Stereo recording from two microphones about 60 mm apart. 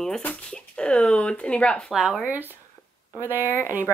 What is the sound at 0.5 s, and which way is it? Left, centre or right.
Speech, centre.